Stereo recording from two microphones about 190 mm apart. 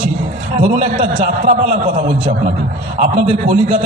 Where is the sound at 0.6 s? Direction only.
40° right (ahead or behind).